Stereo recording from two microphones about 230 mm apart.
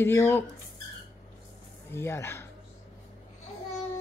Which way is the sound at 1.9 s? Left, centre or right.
Centre.